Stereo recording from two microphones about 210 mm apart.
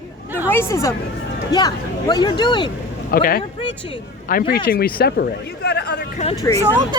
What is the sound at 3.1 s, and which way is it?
Speech, 45° left (ahead or behind).